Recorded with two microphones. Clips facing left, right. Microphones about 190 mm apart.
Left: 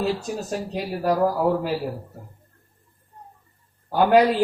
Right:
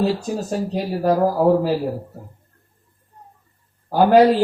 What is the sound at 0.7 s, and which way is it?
A man's voice, 30° right (ahead or behind).